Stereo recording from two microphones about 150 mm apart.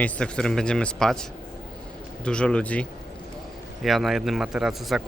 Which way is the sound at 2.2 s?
5° left (ahead or behind).